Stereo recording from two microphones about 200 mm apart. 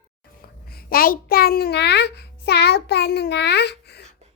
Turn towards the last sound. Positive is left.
turn(degrees=55)  # may be behind; listen again after turning